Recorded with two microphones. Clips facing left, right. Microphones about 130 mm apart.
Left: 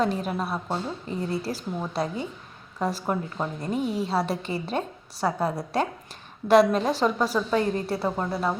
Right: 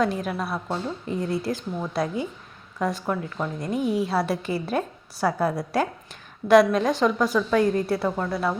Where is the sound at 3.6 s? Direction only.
Centre (ahead or behind).